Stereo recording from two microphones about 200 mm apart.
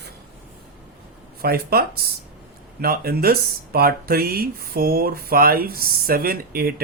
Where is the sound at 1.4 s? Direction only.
50° right (ahead or behind).